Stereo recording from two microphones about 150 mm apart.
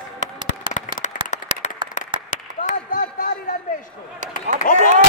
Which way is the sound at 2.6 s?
65° left (ahead or behind).